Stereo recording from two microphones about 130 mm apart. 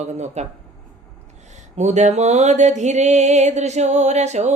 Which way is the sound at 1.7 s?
60° right (ahead or behind).